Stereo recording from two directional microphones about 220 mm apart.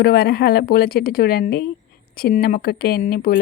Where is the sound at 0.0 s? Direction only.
45° left (ahead or behind).